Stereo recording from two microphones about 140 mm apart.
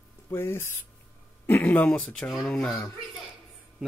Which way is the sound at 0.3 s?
15° left (ahead or behind).